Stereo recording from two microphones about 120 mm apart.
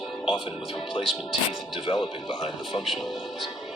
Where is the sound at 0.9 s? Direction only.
45° left (ahead or behind).